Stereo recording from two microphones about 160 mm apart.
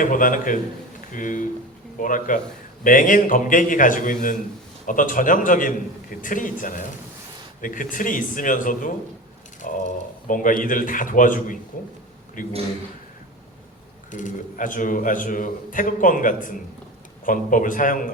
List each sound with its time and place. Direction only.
0.0 s a man's voice: 55° left (ahead or behind)
14.1 s a man's voice: 50° left (ahead or behind)